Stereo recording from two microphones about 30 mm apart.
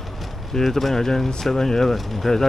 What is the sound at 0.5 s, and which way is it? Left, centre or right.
Speech, centre.